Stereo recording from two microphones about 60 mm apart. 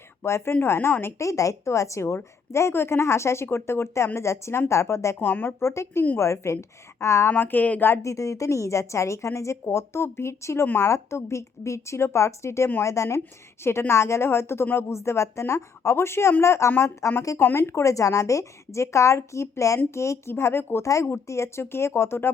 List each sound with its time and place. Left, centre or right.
0.2 s speech: left
1.2 s a woman's voice: left
5.2 s speech: left
7.3 s speech: left
8.0 s a woman's voice: left
12.9 s a woman's voice: left
13.7 s a woman's voice: left
20.3 s speech: left
20.8 s a woman's voice: left